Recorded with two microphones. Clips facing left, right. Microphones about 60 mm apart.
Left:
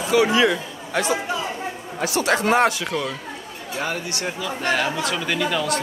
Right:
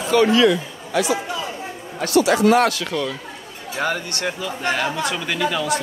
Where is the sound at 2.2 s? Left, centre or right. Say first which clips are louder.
Right 5 dB; left.